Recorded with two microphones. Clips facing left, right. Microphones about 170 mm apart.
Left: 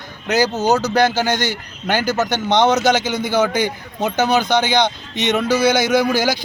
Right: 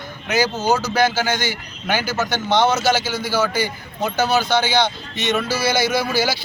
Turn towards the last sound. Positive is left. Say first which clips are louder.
# left 4 dB
turn(degrees=15)  # may be behind; listen again after turning